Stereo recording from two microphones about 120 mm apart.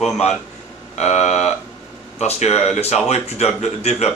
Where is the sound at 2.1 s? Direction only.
65° left (ahead or behind).